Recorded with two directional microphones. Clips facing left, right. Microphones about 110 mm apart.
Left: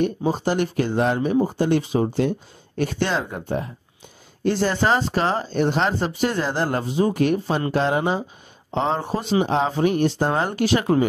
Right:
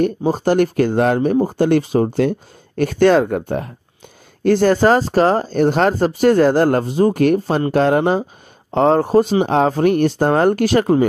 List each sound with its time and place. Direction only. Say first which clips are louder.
0.2 s speech: right 6 dB; 45° right (ahead or behind)